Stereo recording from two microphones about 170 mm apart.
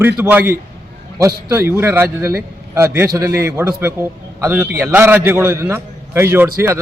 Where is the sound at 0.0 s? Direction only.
10° right (ahead or behind).